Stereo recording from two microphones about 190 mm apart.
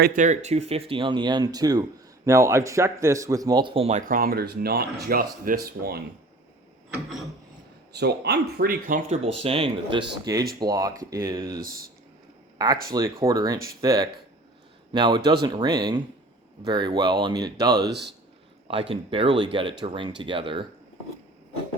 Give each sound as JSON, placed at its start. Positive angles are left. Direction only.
{"t": 0.0, "sound": "speech", "side_deg": -45}
{"t": 7.9, "sound": "speech", "side_deg": -60}
{"t": 9.2, "sound": "speech", "side_deg": -30}
{"t": 10.3, "sound": "speech", "side_deg": -20}
{"t": 11.6, "sound": "speech", "side_deg": -50}
{"t": 12.5, "sound": "speech", "side_deg": -20}